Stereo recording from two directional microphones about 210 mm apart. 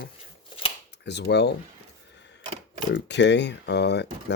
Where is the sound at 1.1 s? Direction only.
55° left (ahead or behind).